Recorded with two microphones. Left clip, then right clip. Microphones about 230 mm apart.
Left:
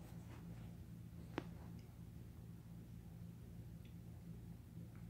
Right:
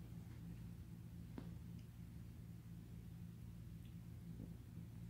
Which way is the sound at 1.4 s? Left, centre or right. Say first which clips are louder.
Left 9 dB; left.